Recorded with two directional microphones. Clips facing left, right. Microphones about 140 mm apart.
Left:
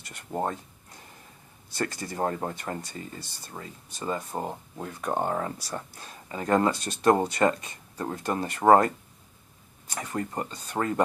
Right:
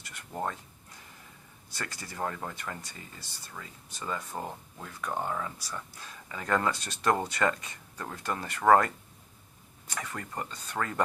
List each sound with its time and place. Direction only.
0.1 s speech: 30° left (ahead or behind)
1.8 s speech: 40° left (ahead or behind)
9.9 s speech: 30° left (ahead or behind)